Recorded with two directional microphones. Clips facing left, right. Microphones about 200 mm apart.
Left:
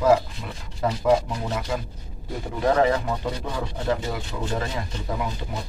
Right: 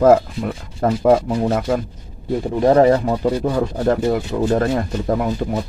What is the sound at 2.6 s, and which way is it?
Speech, 40° right (ahead or behind).